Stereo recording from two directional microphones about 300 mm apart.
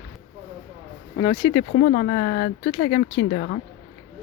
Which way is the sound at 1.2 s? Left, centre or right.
Centre.